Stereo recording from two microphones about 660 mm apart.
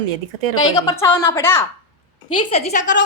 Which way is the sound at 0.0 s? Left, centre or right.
Right.